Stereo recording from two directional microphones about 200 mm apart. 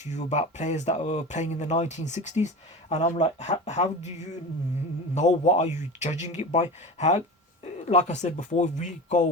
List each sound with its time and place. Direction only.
0.0 s speech: 35° left (ahead or behind)